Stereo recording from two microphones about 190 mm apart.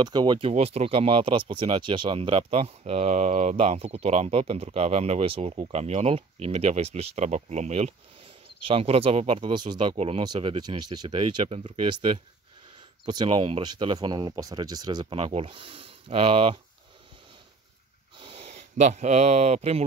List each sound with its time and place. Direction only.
0.0 s speech: 25° right (ahead or behind)
18.1 s speech: 25° right (ahead or behind)